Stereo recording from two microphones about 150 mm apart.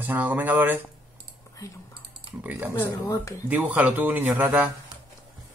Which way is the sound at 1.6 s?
20° left (ahead or behind).